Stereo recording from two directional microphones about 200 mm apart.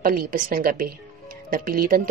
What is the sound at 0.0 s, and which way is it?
A woman's voice, 45° right (ahead or behind).